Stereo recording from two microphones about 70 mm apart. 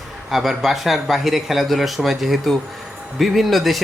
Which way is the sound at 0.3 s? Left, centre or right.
Centre.